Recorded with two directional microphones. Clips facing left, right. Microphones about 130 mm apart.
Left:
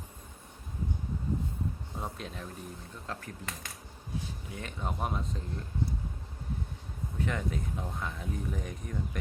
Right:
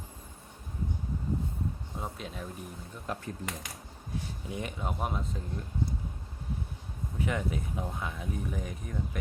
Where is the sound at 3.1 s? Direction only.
15° right (ahead or behind).